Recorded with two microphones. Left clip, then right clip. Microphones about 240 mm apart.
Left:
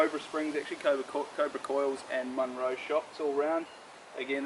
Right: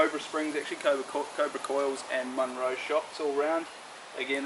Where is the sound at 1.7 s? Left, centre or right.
Left.